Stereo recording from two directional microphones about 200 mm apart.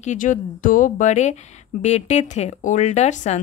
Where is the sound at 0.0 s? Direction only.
40° left (ahead or behind).